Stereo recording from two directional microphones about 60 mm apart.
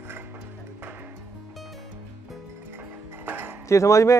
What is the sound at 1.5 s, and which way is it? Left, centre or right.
Music, centre.